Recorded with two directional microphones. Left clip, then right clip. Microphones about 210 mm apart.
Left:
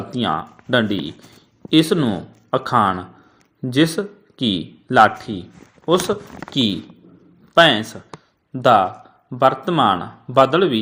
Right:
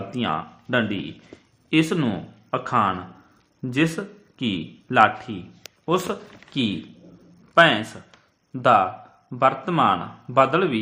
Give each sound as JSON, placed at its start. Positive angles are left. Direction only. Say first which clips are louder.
{"t": 0.7, "sound": "a man's voice", "louder": "left 5 dB", "side_deg": 25}